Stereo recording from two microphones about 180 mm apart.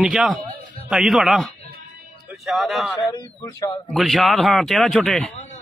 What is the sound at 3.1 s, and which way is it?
Speech, 20° left (ahead or behind).